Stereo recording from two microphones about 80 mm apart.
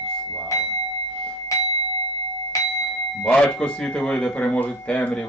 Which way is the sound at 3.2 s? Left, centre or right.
Centre.